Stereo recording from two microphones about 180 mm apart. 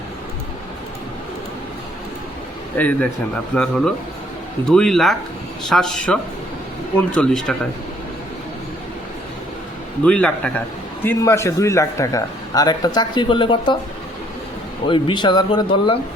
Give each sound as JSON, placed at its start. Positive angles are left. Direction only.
{"t": 2.7, "sound": "a man's voice", "side_deg": 10}
{"t": 10.0, "sound": "a man's voice", "side_deg": 5}
{"t": 14.8, "sound": "speech", "side_deg": 25}